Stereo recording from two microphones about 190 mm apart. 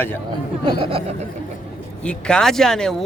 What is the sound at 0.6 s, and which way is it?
Speech, 30° right (ahead or behind).